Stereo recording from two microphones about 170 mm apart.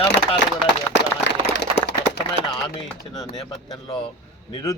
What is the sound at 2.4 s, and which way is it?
Speech, 35° right (ahead or behind).